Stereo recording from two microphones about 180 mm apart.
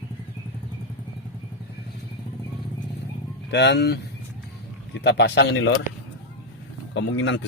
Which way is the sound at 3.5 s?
70° left (ahead or behind).